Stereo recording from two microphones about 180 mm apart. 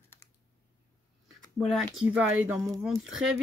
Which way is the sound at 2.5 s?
20° right (ahead or behind).